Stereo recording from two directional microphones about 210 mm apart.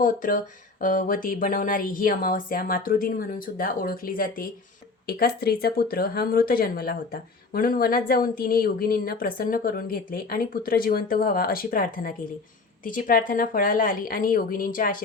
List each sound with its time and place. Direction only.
0.0 s speech: 40° left (ahead or behind)